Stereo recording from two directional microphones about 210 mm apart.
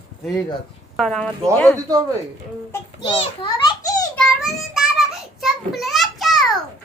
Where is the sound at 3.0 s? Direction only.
25° left (ahead or behind).